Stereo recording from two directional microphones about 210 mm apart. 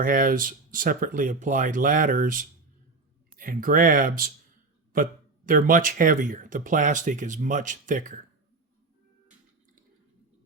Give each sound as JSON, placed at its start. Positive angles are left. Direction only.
{"t": 0.0, "sound": "speech", "side_deg": -40}